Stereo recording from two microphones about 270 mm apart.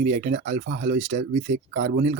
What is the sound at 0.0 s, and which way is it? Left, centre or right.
Speech, right.